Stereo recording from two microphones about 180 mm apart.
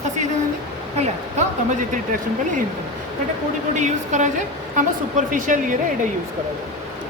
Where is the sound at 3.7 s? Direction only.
40° right (ahead or behind).